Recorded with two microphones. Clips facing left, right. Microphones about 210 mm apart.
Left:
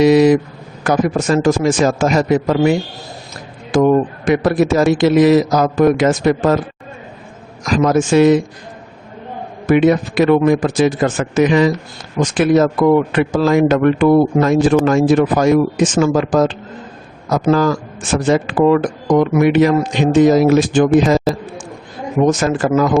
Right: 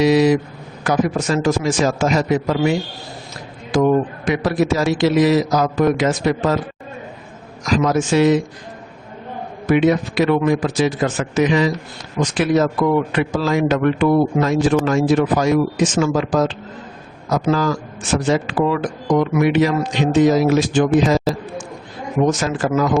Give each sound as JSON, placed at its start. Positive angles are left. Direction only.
{"t": 0.0, "sound": "a man's voice", "side_deg": 50}
{"t": 4.3, "sound": "a man's voice", "side_deg": 50}
{"t": 7.7, "sound": "a man's voice", "side_deg": 50}
{"t": 9.6, "sound": "a man's voice", "side_deg": 50}
{"t": 22.3, "sound": "a man's voice", "side_deg": 50}